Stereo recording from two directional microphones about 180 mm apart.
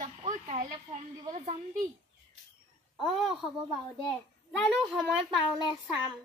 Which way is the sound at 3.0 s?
Centre (ahead or behind).